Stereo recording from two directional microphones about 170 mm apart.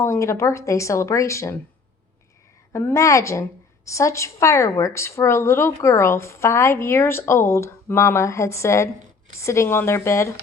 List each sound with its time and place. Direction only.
0.0 s a woman's voice: 15° left (ahead or behind)
2.7 s a woman's voice: 15° left (ahead or behind)